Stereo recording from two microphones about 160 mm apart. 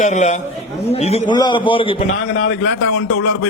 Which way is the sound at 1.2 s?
30° left (ahead or behind).